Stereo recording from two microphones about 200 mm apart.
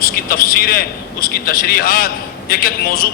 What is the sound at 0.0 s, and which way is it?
A man's voice, 45° left (ahead or behind).